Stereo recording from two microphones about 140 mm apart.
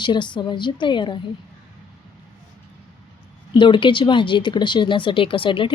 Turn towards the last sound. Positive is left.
turn(degrees=35)  # may be behind; listen again after turning